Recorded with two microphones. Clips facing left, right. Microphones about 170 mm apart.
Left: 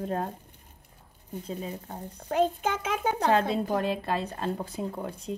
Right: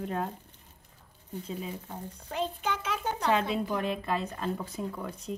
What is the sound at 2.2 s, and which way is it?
A child's voice, 50° left (ahead or behind).